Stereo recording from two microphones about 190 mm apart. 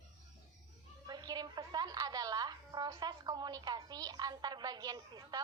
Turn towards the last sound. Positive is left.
turn(degrees=-20)  # may be behind; listen again after turning